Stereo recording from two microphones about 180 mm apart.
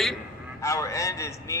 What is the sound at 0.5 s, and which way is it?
A man's voice, 15° left (ahead or behind).